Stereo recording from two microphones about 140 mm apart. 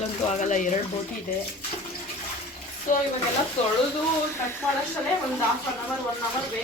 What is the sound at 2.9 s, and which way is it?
Speech, 65° left (ahead or behind).